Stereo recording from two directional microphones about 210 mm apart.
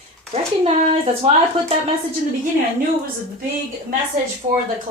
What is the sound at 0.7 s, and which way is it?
Speech, 30° right (ahead or behind).